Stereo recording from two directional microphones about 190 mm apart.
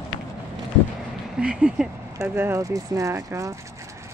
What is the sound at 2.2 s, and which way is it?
Speech, 15° right (ahead or behind).